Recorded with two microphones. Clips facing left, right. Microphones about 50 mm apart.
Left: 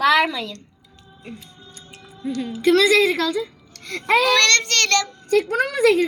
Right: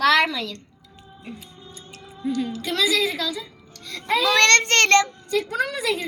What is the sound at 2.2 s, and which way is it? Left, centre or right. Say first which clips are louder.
Speech: right 1 dB; centre.